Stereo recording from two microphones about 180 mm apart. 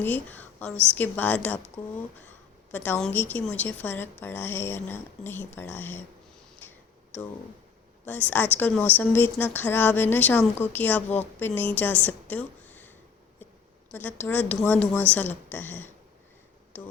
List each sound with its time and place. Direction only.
0.0 s a woman's voice: 10° left (ahead or behind)
2.7 s a woman's voice: 10° left (ahead or behind)
6.6 s tick-tock: 10° left (ahead or behind)
8.0 s a woman's voice: 10° left (ahead or behind)
14.3 s a woman's voice: 10° left (ahead or behind)